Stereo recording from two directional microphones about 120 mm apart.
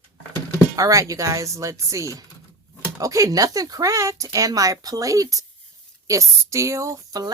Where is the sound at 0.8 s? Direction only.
25° right (ahead or behind).